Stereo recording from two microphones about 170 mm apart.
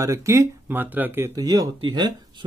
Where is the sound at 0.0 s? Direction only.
20° right (ahead or behind).